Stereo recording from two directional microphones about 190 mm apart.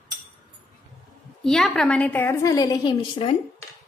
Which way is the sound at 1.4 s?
Centre (ahead or behind).